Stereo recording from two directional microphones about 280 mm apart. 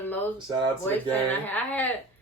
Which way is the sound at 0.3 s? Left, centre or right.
Centre.